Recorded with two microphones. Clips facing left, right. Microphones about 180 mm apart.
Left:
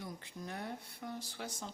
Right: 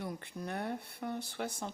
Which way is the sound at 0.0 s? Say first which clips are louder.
Right 5 dB; 65° right (ahead or behind).